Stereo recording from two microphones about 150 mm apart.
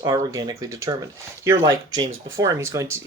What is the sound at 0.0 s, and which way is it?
Speech, 25° right (ahead or behind).